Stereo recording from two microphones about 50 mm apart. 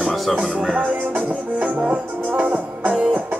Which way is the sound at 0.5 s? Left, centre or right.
Right.